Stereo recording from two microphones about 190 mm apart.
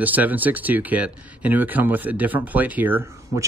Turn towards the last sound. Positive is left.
turn(degrees=-10)  # may be behind; listen again after turning